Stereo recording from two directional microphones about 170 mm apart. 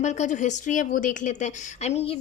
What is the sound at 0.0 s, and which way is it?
Speech, 45° left (ahead or behind).